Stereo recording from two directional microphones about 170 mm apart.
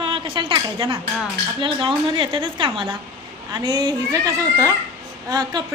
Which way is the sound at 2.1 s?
30° right (ahead or behind).